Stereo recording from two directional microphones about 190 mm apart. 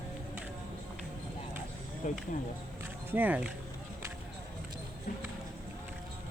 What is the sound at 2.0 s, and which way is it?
Speech, 45° left (ahead or behind).